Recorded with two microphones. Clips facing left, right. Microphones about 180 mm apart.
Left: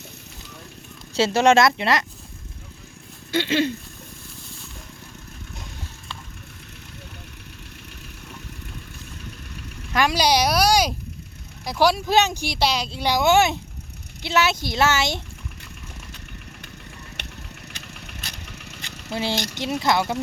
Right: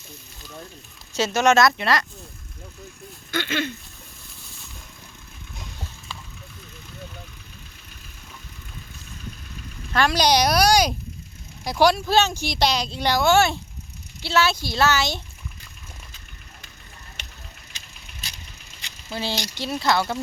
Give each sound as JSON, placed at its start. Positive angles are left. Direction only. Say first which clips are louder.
{"t": 1.1, "sound": "speech", "louder": "left 2 dB", "side_deg": 30}
{"t": 3.3, "sound": "speech", "louder": "left 5 dB", "side_deg": 30}
{"t": 9.9, "sound": "speech", "louder": "even", "side_deg": 10}
{"t": 11.9, "sound": "speech", "louder": "even", "side_deg": 15}
{"t": 13.1, "sound": "speech", "louder": "left 1 dB", "side_deg": 15}
{"t": 17.2, "sound": "vehicle", "louder": "left 6 dB", "side_deg": 60}
{"t": 19.1, "sound": "speech", "louder": "left 3 dB", "side_deg": 20}